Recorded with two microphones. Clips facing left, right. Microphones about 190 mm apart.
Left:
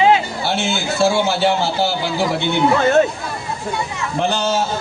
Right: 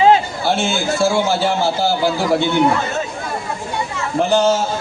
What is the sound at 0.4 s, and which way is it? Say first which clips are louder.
A man's voice: right 3 dB; 65° left (ahead or behind).